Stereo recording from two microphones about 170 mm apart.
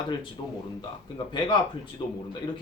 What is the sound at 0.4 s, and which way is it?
Speech, 30° left (ahead or behind).